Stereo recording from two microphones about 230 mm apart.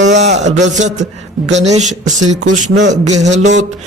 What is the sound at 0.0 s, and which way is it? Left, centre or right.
A man's voice, right.